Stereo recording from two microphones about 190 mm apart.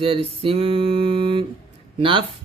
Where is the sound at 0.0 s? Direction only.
30° right (ahead or behind).